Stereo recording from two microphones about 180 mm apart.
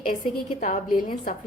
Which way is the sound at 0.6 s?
45° left (ahead or behind).